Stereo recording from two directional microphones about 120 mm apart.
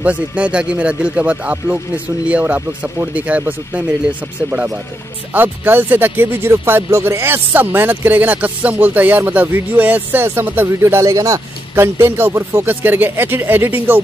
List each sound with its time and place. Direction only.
0.0 s speech: 10° right (ahead or behind)